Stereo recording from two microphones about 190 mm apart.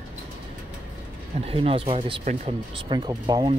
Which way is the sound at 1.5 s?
30° right (ahead or behind).